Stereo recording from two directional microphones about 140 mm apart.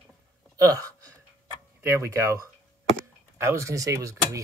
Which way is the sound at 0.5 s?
25° right (ahead or behind).